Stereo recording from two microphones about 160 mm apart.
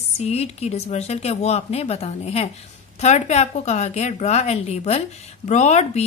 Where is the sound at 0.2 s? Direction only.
40° left (ahead or behind).